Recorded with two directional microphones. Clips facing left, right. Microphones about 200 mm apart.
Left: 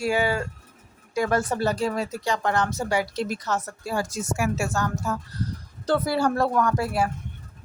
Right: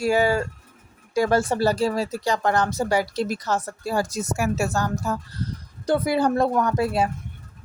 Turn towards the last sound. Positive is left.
turn(degrees=-20)  # may be behind; listen again after turning